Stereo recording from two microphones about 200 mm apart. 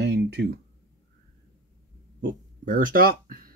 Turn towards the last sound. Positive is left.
turn(degrees=-45)  # may be behind; listen again after turning